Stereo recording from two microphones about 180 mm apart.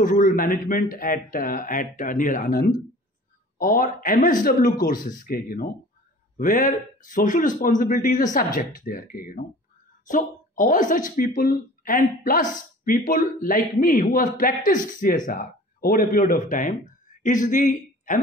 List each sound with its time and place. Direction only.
0.0 s speech: 45° left (ahead or behind)